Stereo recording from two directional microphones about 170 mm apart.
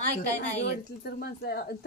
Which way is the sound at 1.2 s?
70° left (ahead or behind).